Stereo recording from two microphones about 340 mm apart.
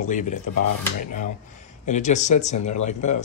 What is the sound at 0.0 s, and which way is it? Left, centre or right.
Speech, left.